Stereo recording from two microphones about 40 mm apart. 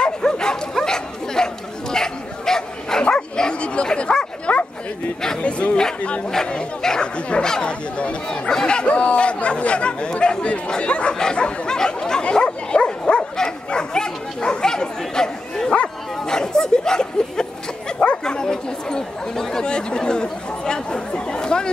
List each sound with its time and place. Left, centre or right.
0.0 s dog: centre
3.0 s bow-wow: left
5.4 s speech: left
7.4 s speech: centre
8.0 s speech: left
8.5 s speech: centre
8.8 s speech: left
11.1 s bow-wow: left
16.3 s a sound: centre
18.2 s chatter: centre